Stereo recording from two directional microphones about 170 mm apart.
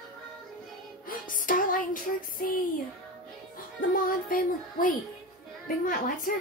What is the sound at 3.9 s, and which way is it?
Music, 55° left (ahead or behind).